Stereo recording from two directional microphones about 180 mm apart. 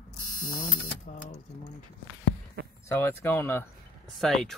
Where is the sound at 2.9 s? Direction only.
10° left (ahead or behind).